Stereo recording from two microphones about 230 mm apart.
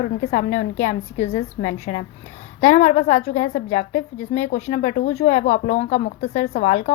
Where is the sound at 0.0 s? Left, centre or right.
Left.